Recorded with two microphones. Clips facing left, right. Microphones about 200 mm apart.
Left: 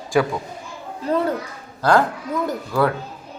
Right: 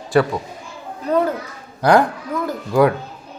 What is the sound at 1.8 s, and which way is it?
Speech, 15° right (ahead or behind).